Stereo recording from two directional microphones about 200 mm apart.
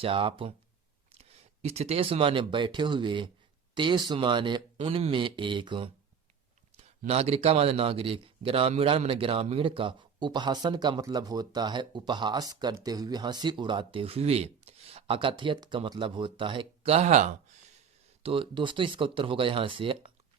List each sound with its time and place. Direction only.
0.0 s speech: 25° right (ahead or behind)